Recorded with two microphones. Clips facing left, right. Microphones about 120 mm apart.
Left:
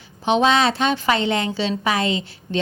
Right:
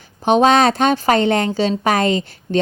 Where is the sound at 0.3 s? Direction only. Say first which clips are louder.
Right 5 dB; 50° right (ahead or behind).